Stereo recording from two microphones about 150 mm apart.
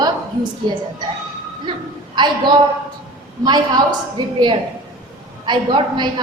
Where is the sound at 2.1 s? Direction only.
30° right (ahead or behind).